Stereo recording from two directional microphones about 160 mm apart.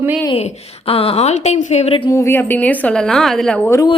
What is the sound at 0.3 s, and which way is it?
A woman's voice, 40° left (ahead or behind).